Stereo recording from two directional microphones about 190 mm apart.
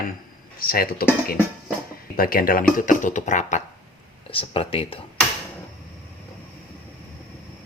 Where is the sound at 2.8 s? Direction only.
45° left (ahead or behind).